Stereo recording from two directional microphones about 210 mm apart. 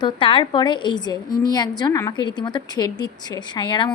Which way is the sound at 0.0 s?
25° left (ahead or behind).